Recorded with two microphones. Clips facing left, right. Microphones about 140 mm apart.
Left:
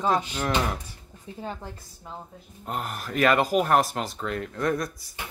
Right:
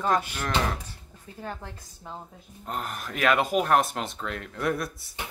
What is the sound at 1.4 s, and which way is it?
Speech, 15° left (ahead or behind).